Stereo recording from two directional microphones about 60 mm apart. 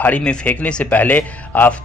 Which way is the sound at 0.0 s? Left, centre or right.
Centre.